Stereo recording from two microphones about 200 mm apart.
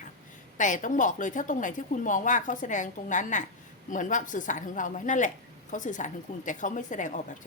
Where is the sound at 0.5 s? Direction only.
40° left (ahead or behind).